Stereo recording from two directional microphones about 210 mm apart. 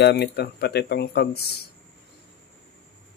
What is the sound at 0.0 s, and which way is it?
Speech, 55° left (ahead or behind).